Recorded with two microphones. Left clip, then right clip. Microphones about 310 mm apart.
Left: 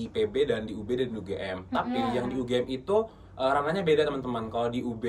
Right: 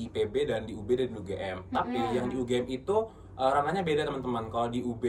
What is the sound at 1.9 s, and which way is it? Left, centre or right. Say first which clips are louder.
Speech: left 1 dB; left.